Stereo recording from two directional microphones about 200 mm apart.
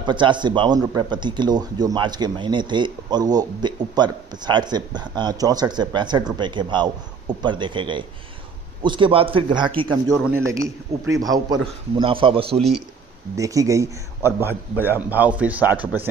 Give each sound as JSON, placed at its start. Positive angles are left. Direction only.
{"t": 0.0, "sound": "speech", "side_deg": -25}
{"t": 10.1, "sound": "a man's voice", "side_deg": -10}
{"t": 13.4, "sound": "a man's voice", "side_deg": -15}